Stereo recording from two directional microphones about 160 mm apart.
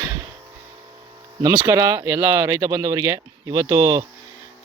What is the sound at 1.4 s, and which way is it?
Speech, 20° right (ahead or behind).